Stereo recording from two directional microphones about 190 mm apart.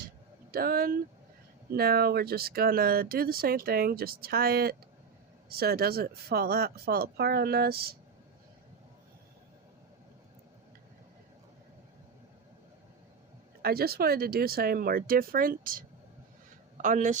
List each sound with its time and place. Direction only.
0.5 s speech: 50° right (ahead or behind)
13.6 s speech: 55° right (ahead or behind)